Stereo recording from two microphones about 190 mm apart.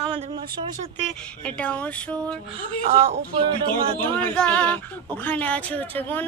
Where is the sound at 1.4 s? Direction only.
5° left (ahead or behind).